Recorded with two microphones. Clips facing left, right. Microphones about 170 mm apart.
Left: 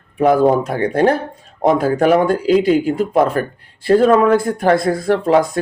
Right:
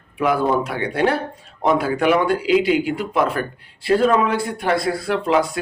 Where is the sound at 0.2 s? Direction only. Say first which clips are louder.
Left 6 dB; 40° left (ahead or behind).